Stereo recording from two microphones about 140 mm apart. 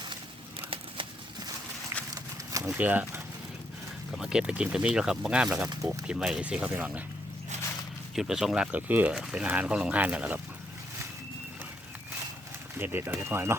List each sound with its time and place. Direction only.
2.6 s speech: 10° right (ahead or behind)
4.2 s speech: 5° right (ahead or behind)
8.1 s speech: 5° right (ahead or behind)
12.8 s speech: 15° right (ahead or behind)